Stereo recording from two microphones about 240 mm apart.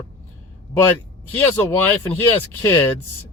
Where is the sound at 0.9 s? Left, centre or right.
Centre.